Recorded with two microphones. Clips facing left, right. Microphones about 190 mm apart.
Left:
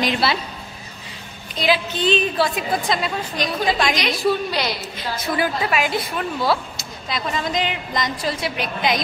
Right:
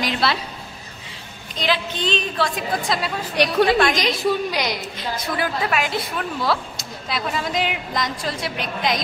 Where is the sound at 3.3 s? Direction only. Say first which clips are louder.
Right 6 dB; 70° right (ahead or behind).